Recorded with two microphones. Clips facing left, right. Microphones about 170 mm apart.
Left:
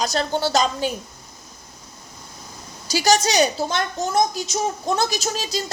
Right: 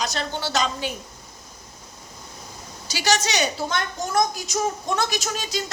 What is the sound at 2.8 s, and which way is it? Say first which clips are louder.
A woman's voice: left 5 dB; 40° left (ahead or behind).